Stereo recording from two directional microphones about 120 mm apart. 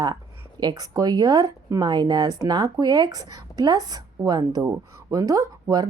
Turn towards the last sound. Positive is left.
turn(degrees=-30)  # may be behind; listen again after turning